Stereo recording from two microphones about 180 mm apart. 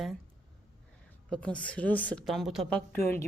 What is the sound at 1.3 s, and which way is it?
Speech, 5° left (ahead or behind).